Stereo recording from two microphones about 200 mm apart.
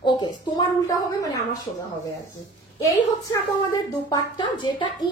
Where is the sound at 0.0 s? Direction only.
20° left (ahead or behind).